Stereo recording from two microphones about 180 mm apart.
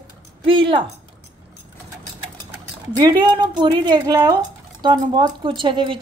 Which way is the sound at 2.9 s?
25° right (ahead or behind).